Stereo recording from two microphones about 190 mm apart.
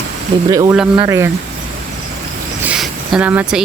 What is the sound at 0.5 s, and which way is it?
Speech, 15° right (ahead or behind).